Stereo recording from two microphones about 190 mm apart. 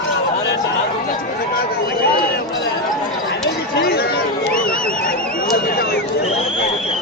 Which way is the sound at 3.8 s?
55° left (ahead or behind).